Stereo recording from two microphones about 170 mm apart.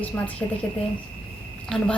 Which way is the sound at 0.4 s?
15° left (ahead or behind).